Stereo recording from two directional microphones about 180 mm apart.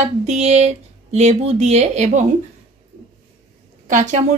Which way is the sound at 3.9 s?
45° right (ahead or behind).